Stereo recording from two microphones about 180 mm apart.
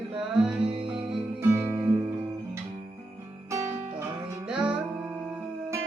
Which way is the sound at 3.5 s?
15° right (ahead or behind).